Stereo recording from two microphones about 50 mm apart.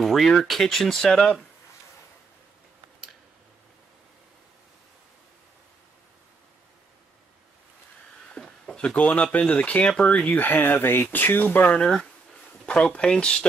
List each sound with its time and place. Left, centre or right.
0.0 s speech: centre
8.2 s a sound: centre
8.9 s speech: left
11.8 s speech: centre